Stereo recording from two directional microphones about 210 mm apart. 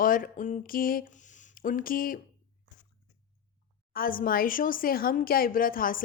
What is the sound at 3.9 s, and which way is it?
A woman's voice, 40° left (ahead or behind).